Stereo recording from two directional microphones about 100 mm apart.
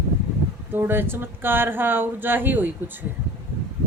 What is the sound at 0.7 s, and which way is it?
Speech, 20° right (ahead or behind).